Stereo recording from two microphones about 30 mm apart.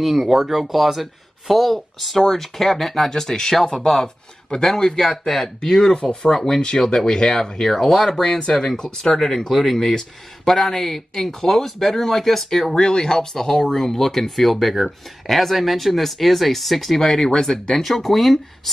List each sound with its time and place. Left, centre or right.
0.0 s speech: centre
12.7 s speech: left
17.7 s speech: centre